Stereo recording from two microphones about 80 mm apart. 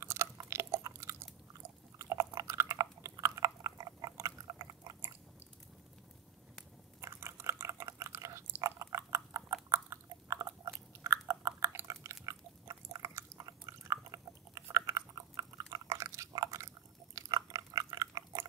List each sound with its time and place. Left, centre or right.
0.0 s chewing: right
7.0 s chewing: right